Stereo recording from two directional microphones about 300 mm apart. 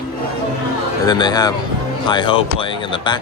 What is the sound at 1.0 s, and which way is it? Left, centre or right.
Speech, centre.